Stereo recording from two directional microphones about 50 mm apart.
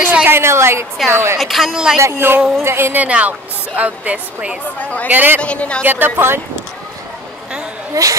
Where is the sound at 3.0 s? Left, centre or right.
Right.